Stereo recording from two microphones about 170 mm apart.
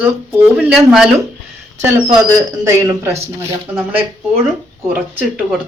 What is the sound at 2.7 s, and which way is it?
Speech, 15° right (ahead or behind).